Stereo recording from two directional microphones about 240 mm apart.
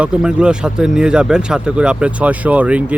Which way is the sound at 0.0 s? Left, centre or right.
Centre.